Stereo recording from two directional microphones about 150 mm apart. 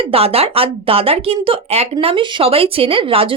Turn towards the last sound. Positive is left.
turn(degrees=-35)  # may be behind; listen again after turning